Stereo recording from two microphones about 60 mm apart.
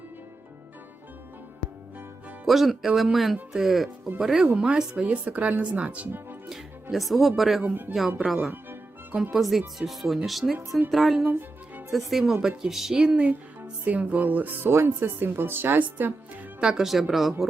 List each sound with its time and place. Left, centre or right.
2.5 s a woman's voice: centre; by 6.1 s right
6.9 s speech: centre
7.6 s speech: right
8.2 s speech: centre
11.2 s speech: right
11.9 s a woman's voice: centre
13.6 s speech: right
14.7 s speech: right
16.6 s speech: centre